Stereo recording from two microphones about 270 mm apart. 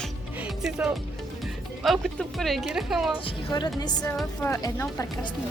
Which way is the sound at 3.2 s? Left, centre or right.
Centre.